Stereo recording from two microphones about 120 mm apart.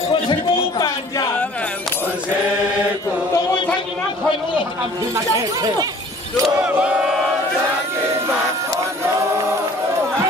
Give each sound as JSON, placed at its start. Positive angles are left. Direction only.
{"t": 0.1, "sound": "a sound", "side_deg": 35}
{"t": 5.1, "sound": "speech", "side_deg": -30}
{"t": 6.6, "sound": "chant", "side_deg": -10}